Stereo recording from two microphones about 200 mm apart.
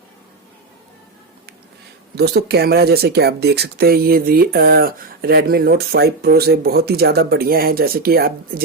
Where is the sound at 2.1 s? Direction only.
55° right (ahead or behind).